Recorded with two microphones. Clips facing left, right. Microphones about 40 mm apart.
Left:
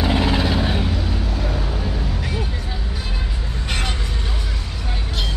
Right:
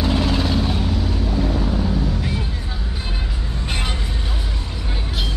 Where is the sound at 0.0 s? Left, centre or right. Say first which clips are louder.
Left 1 dB; left.